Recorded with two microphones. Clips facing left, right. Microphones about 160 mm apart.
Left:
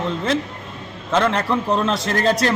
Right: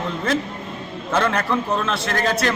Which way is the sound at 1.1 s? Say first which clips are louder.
Left 2 dB; 25° left (ahead or behind).